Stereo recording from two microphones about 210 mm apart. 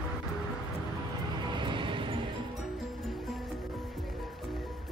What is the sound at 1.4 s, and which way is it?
Music, 20° right (ahead or behind).